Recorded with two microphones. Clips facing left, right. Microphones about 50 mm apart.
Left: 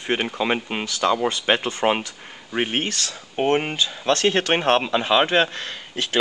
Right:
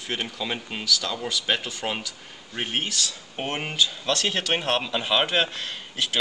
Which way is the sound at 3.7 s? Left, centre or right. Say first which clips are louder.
Left 3 dB; left.